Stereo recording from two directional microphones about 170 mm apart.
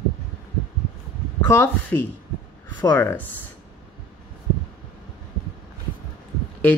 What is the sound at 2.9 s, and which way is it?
Speech, 10° left (ahead or behind).